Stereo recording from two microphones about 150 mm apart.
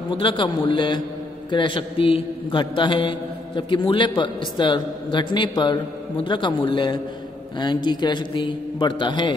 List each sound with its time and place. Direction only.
0.2 s a man's voice: 35° left (ahead or behind)